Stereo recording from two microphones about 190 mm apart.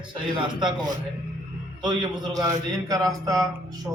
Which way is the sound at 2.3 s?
20° right (ahead or behind).